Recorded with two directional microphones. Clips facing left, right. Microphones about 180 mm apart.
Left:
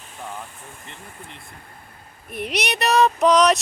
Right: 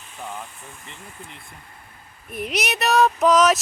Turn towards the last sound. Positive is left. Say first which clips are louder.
# left 1 dB
turn(degrees=0)  # may be behind; listen again after turning